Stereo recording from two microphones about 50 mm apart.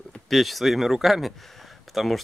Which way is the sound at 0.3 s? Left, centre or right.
Centre.